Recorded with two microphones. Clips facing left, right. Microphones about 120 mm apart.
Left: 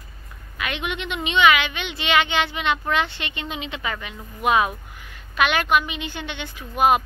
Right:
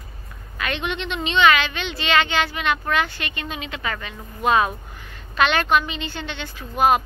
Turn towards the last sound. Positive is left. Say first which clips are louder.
# even
turn(degrees=15)  # may be behind; listen again after turning